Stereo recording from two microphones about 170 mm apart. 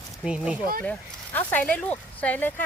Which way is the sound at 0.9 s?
10° left (ahead or behind).